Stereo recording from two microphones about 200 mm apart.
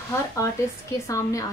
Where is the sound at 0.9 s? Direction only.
15° left (ahead or behind).